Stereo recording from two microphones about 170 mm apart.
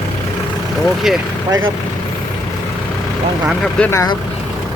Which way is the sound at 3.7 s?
10° left (ahead or behind).